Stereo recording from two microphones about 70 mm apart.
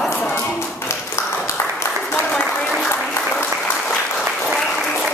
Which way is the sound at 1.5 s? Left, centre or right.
Left.